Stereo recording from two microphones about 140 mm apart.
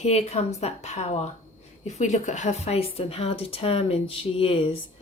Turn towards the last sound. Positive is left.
turn(degrees=40)  # may be behind; listen again after turning